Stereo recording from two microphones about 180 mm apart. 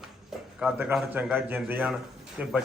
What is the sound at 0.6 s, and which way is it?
A man's voice, 5° right (ahead or behind).